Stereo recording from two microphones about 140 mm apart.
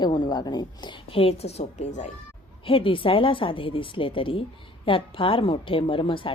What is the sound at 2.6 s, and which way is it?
Speech, 40° left (ahead or behind).